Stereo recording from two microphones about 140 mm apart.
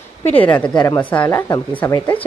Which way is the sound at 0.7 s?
25° left (ahead or behind).